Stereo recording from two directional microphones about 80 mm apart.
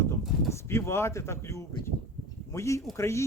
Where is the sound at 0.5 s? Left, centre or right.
Left.